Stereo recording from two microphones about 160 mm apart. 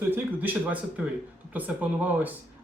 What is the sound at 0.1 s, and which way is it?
Speech, 10° right (ahead or behind).